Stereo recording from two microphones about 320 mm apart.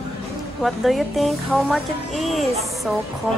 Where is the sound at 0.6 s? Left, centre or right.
Centre.